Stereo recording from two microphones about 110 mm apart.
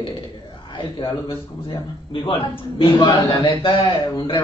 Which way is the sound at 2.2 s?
50° left (ahead or behind).